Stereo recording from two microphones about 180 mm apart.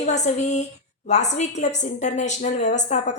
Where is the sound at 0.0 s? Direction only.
40° left (ahead or behind).